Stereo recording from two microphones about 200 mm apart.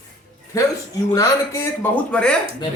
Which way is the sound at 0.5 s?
15° left (ahead or behind).